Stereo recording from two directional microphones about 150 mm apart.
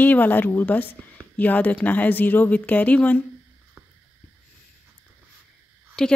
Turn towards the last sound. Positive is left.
turn(degrees=5)  # may be behind; listen again after turning